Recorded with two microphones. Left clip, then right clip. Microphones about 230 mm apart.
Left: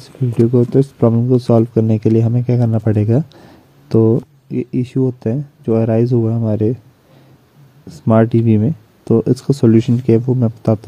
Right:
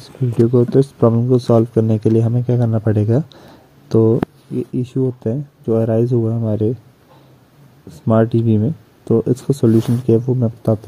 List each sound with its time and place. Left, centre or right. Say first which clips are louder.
0.0 s speech: left 1 dB; centre
7.9 s speech: left 2 dB; centre
10.2 s speech: left 2 dB; centre